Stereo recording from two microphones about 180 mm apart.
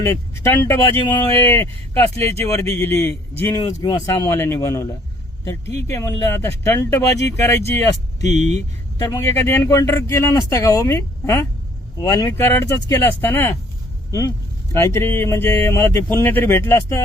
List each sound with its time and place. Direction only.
0.0 s speech: 15° left (ahead or behind)
8.4 s speech: 40° right (ahead or behind)
9.0 s speech: 20° left (ahead or behind)